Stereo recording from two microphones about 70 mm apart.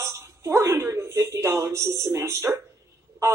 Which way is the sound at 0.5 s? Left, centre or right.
Right.